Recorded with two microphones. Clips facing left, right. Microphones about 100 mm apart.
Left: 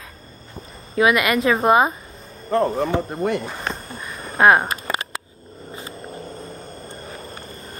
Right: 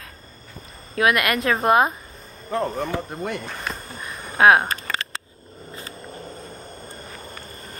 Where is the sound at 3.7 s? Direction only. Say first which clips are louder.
Left 2 dB; centre (ahead or behind).